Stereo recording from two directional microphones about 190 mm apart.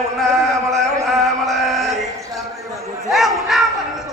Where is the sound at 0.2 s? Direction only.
Centre (ahead or behind).